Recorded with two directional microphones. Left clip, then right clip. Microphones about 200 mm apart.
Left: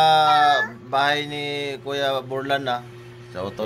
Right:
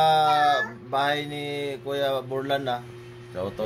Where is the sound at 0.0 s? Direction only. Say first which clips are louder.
Left 4 dB; 20° right (ahead or behind).